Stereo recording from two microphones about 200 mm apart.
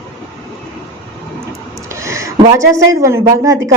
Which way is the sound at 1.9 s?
15° right (ahead or behind).